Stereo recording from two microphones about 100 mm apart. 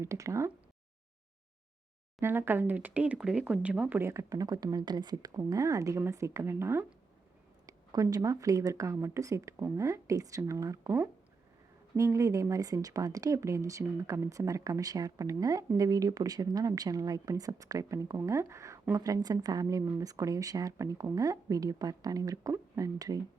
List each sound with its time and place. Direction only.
0.0 s speech: 30° right (ahead or behind)
2.2 s speech: 20° right (ahead or behind)
4.1 s speech: 35° right (ahead or behind)
8.1 s speech: 35° right (ahead or behind)
11.9 s speech: 30° right (ahead or behind)